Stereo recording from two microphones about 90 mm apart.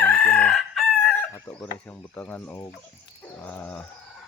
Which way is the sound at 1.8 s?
15° left (ahead or behind).